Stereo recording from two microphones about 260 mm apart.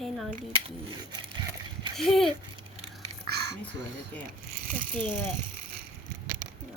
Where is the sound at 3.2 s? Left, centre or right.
Right.